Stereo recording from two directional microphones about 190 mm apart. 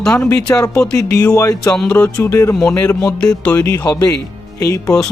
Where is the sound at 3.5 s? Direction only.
15° left (ahead or behind).